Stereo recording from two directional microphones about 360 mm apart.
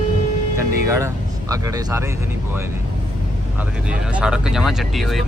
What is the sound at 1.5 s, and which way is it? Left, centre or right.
Speech, centre.